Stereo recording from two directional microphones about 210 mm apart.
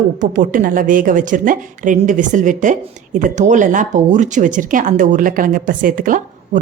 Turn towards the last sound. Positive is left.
turn(degrees=-40)  # may be behind; listen again after turning